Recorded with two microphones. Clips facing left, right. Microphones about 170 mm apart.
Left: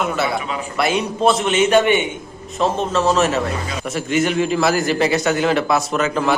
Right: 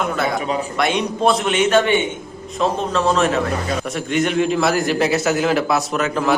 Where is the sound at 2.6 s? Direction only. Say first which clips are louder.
Left 1 dB; centre (ahead or behind).